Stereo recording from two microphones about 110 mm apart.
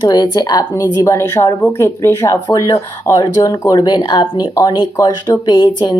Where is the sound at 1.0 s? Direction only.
30° left (ahead or behind).